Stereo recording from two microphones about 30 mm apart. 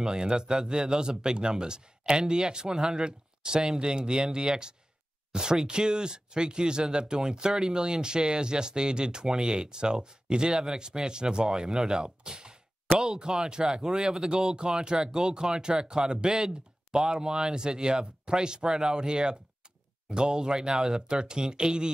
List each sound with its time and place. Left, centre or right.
0.0 s speech: right
12.2 s a sound: right
13.0 s speech: right
21.1 s speech: right